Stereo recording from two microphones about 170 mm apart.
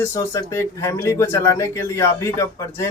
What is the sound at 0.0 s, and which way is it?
Speech, 15° left (ahead or behind).